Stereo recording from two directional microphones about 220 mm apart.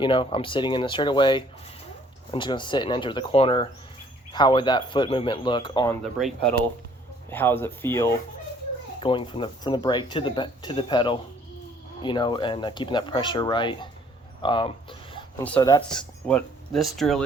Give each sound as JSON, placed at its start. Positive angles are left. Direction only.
{"t": 0.0, "sound": "speech", "side_deg": 25}
{"t": 6.1, "sound": "speech", "side_deg": 0}
{"t": 9.0, "sound": "speech", "side_deg": 25}
{"t": 15.4, "sound": "speech", "side_deg": 10}
{"t": 16.2, "sound": "speech", "side_deg": 0}